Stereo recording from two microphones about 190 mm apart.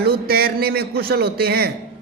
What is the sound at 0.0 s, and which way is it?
A man's voice, 55° right (ahead or behind).